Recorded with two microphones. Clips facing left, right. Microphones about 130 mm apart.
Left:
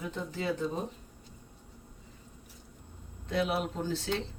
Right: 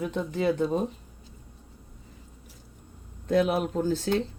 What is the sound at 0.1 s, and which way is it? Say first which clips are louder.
Speech: right 7 dB; 65° right (ahead or behind).